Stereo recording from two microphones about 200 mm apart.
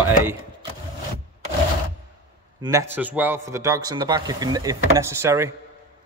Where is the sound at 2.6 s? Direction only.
15° right (ahead or behind).